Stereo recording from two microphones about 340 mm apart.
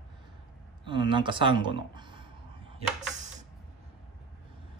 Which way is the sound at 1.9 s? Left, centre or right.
Centre.